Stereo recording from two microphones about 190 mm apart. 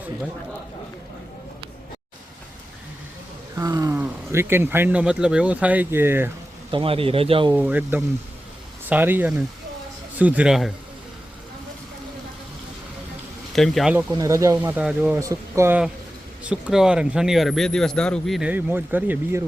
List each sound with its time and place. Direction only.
3.6 s speech: 20° right (ahead or behind)
6.7 s speech: 30° right (ahead or behind)
7.5 s speech: 10° right (ahead or behind)
13.6 s speech: centre (ahead or behind)
13.9 s speech: 15° right (ahead or behind)